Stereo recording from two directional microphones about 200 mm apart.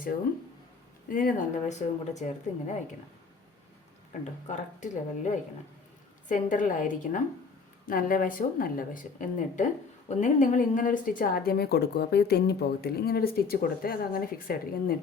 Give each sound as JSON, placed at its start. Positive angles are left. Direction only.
{"t": 1.1, "sound": "speech", "side_deg": 40}
{"t": 4.2, "sound": "a woman's voice", "side_deg": 35}
{"t": 10.1, "sound": "a woman's voice", "side_deg": 40}